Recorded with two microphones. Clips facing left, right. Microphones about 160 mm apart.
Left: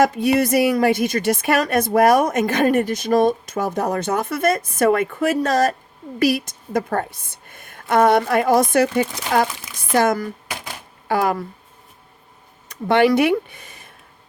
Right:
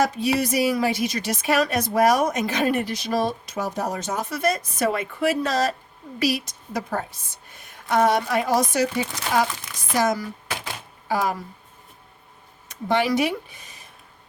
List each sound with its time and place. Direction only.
0.1 s a woman's voice: 55° left (ahead or behind)
12.9 s speech: 60° left (ahead or behind)